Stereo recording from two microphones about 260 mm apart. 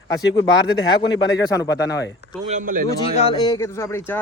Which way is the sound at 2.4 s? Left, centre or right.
Right.